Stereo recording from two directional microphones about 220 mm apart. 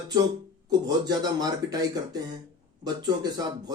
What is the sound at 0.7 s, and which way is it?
Speech, 15° right (ahead or behind).